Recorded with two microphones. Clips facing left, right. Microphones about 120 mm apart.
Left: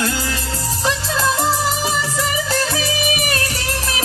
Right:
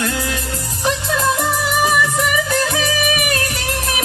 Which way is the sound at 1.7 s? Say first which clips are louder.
Right 4 dB; 30° left (ahead or behind).